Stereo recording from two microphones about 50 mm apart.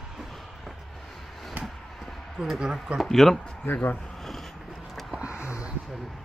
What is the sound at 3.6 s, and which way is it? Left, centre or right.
Speech, left.